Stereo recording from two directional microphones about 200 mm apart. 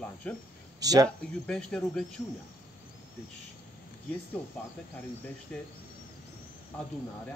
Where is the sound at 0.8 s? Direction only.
20° right (ahead or behind).